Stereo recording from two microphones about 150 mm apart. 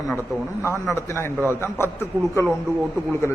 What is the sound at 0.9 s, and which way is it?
Speech, 20° left (ahead or behind).